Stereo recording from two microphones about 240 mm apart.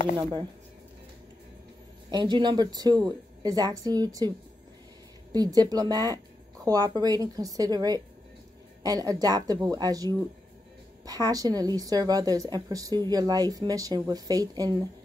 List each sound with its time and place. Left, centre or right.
0.2 s a woman's voice: centre
2.0 s a woman's voice: centre
5.3 s a woman's voice: centre